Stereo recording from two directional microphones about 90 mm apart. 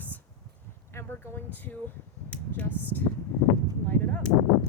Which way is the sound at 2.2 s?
20° left (ahead or behind).